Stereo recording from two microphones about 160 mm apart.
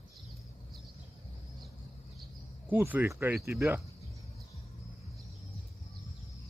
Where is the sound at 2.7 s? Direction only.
10° right (ahead or behind).